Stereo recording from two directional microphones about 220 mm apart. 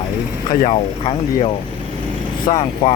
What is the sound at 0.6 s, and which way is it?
Speech, 25° left (ahead or behind).